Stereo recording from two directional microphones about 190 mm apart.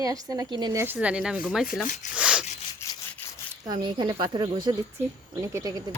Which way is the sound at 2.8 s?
15° left (ahead or behind).